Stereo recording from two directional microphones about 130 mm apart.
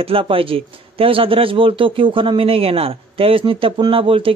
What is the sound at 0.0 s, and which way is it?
A man's voice, 45° right (ahead or behind).